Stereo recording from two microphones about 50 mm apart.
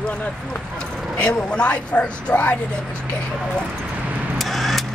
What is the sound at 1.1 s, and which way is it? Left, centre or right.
Speech, left.